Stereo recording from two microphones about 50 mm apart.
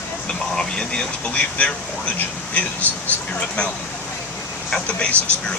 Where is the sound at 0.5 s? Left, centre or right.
Centre.